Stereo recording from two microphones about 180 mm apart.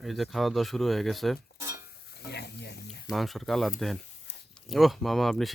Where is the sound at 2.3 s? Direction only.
65° left (ahead or behind).